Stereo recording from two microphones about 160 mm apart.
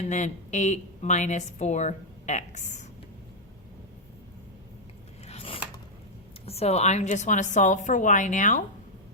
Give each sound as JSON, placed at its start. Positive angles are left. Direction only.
{"t": 0.0, "sound": "speech", "side_deg": 45}
{"t": 5.2, "sound": "a sound", "side_deg": 40}
{"t": 6.4, "sound": "speech", "side_deg": 40}